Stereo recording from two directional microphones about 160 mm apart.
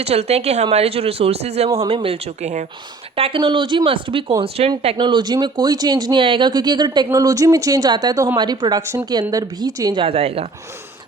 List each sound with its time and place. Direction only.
0.0 s speech: 40° right (ahead or behind)
3.2 s speech: 35° right (ahead or behind)